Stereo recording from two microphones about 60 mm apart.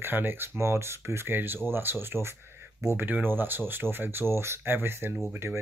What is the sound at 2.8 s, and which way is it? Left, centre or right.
Speech, right.